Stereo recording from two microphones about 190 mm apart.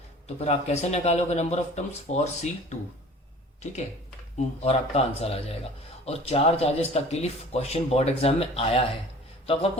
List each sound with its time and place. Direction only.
0.3 s speech: 35° left (ahead or behind)
4.4 s speech: 35° left (ahead or behind)